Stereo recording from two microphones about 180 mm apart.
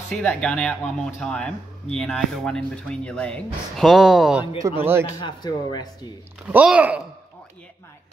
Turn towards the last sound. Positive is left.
turn(degrees=-5)  # may be behind; listen again after turning